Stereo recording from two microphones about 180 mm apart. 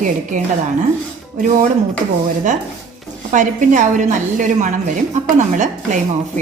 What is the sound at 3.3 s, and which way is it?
A woman's voice, 45° right (ahead or behind).